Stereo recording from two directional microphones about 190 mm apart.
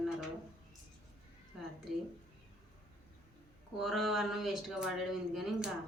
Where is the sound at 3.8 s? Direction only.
Centre (ahead or behind).